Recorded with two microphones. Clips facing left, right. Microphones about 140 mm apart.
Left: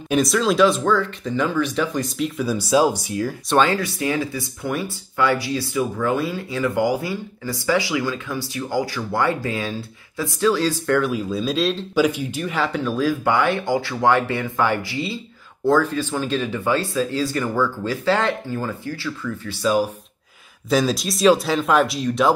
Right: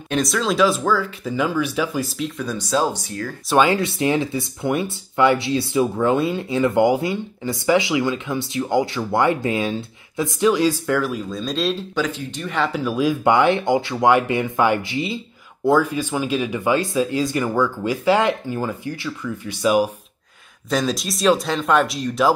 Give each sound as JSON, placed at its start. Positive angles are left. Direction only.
{"t": 0.1, "sound": "speech", "side_deg": 0}
{"t": 3.4, "sound": "speech", "side_deg": -10}
{"t": 3.8, "sound": "speech", "side_deg": -25}
{"t": 10.9, "sound": "speech", "side_deg": 0}
{"t": 20.7, "sound": "speech", "side_deg": 0}